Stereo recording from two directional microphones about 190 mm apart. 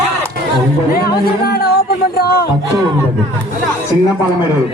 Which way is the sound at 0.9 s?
55° left (ahead or behind).